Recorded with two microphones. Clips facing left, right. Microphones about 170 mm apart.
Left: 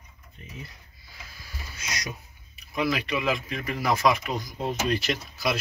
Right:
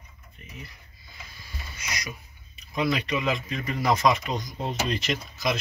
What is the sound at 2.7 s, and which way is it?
Speech, 5° left (ahead or behind).